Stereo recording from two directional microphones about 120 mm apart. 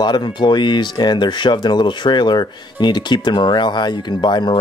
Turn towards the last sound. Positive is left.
turn(degrees=40)  # may be behind; listen again after turning